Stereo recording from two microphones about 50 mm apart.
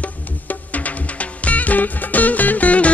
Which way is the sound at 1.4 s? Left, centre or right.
Left.